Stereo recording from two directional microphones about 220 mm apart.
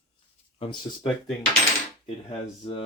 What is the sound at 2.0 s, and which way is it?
Speech, 25° left (ahead or behind).